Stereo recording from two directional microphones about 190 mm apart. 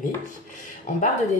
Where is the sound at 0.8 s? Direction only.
40° left (ahead or behind).